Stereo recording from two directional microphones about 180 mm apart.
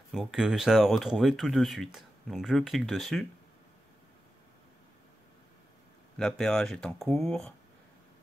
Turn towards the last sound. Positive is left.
turn(degrees=5)  # may be behind; listen again after turning